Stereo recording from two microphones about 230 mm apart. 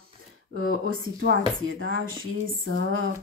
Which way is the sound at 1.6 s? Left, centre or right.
Right.